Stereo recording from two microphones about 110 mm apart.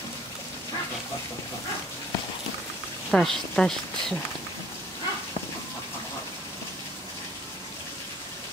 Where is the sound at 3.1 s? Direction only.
5° left (ahead or behind).